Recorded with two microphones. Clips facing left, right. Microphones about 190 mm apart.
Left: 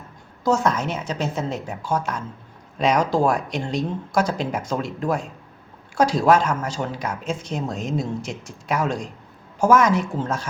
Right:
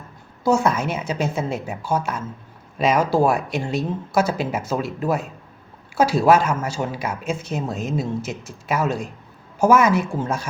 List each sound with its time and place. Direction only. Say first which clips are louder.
0.4 s a woman's voice: right 2 dB; 10° right (ahead or behind)